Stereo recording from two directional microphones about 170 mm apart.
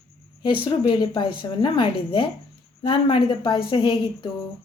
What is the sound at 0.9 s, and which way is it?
A woman's voice, 30° left (ahead or behind).